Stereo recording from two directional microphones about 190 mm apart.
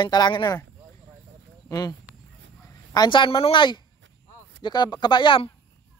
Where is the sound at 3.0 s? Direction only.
25° left (ahead or behind).